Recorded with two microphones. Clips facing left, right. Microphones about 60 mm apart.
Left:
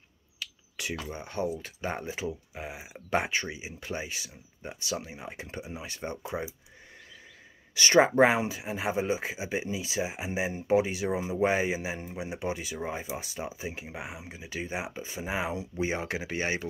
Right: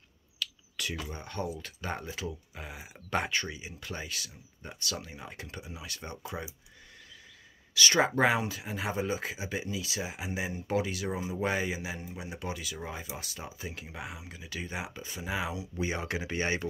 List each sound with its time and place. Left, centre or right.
0.4 s a sound: centre
0.9 s speech: left
7.7 s speech: left
15.7 s speech: centre